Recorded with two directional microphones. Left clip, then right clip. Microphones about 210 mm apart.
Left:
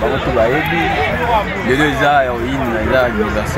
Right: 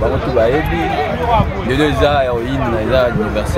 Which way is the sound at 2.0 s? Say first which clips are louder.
Left 1 dB; 15° right (ahead or behind).